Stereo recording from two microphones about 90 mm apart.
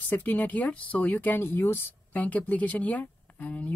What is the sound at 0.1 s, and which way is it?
Speech, 20° left (ahead or behind).